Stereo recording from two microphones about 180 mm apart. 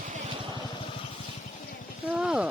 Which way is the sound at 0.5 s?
25° left (ahead or behind).